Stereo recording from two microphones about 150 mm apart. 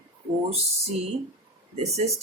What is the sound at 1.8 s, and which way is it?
Speech, 45° right (ahead or behind).